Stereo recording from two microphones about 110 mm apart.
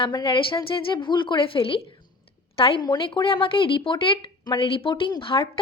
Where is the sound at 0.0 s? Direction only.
45° left (ahead or behind).